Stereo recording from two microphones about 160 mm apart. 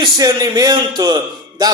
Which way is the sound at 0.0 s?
25° right (ahead or behind).